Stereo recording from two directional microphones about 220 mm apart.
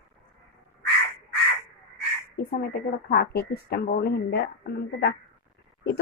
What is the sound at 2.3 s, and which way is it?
A woman's voice, 45° left (ahead or behind).